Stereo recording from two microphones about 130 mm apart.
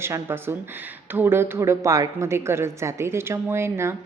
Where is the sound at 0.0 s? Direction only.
20° right (ahead or behind).